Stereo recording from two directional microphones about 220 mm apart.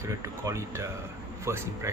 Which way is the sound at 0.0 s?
15° right (ahead or behind).